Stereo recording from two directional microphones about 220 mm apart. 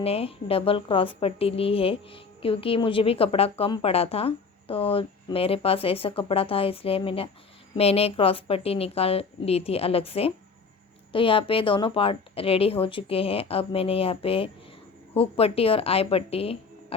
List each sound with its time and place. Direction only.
0.0 s a woman's voice: 25° left (ahead or behind)